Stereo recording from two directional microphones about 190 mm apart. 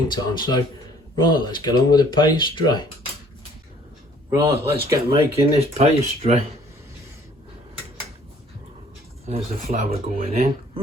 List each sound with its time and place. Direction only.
0.1 s speech: 25° left (ahead or behind)
4.3 s speech: 15° right (ahead or behind)
5.4 s speech: 30° right (ahead or behind)
9.2 s speech: 30° right (ahead or behind)
10.2 s speech: 50° right (ahead or behind)